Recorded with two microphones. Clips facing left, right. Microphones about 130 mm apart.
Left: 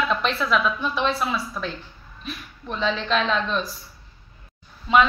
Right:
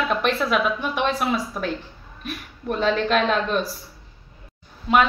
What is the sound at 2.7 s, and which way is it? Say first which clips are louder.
Speech: right 3 dB; 50° right (ahead or behind).